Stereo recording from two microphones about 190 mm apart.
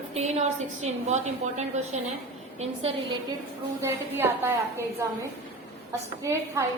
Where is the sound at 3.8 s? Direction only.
10° right (ahead or behind).